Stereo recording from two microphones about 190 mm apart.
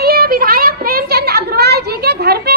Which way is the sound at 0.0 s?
55° right (ahead or behind).